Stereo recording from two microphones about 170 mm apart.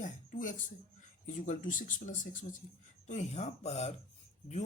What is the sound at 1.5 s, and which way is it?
Speech, 50° left (ahead or behind).